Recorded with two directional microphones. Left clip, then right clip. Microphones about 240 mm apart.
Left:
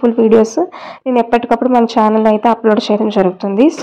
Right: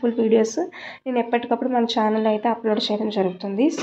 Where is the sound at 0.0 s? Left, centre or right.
Left.